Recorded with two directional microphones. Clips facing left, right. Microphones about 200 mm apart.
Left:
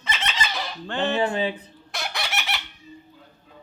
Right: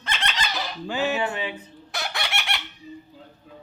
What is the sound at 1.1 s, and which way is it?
Fowl, 35° left (ahead or behind).